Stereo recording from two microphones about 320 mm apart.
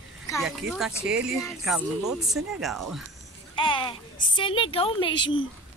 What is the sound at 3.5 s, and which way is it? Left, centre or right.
A woman's voice, centre.